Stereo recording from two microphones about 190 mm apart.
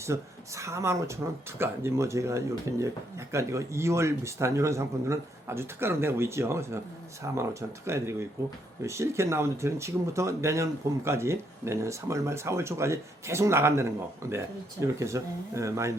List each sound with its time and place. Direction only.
0.0 s speech: 15° right (ahead or behind)